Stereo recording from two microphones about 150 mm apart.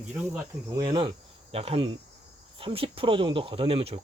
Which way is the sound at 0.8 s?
35° right (ahead or behind).